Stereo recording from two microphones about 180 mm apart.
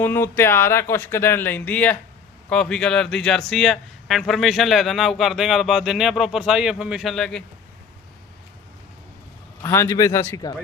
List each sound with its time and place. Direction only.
0.0 s a man's voice: 10° left (ahead or behind)
9.6 s speech: 15° left (ahead or behind)